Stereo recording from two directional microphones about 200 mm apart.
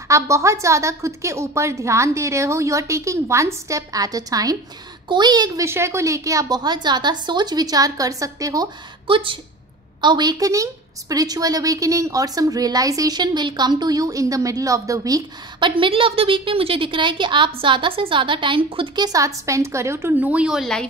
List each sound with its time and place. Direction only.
0.1 s a woman's voice: 15° right (ahead or behind)